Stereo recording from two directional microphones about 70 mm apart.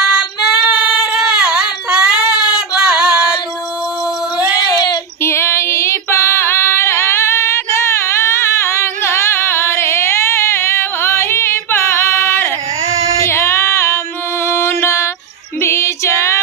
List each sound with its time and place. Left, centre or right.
0.0 s female singing: centre
5.2 s female singing: left
13.2 s child singing: left
14.5 s music: left